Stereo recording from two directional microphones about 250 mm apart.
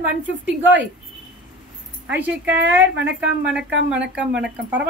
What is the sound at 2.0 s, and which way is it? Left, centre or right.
Speech, centre.